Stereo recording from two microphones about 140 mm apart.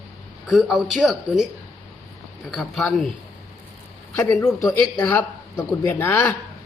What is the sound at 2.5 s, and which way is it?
Speech, centre (ahead or behind).